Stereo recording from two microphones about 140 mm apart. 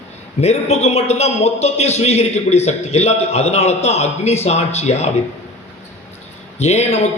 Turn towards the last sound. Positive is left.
turn(degrees=50)  # may be behind; listen again after turning